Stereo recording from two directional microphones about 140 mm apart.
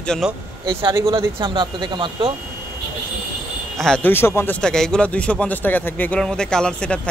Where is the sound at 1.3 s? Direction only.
35° right (ahead or behind).